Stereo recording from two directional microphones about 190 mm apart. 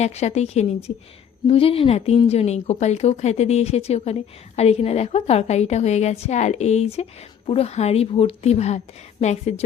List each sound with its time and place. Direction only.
0.0 s speech: 35° left (ahead or behind)